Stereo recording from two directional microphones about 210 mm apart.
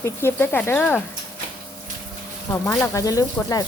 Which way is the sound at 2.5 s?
15° left (ahead or behind).